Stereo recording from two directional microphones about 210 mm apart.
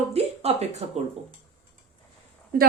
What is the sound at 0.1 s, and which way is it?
Speech, 30° right (ahead or behind).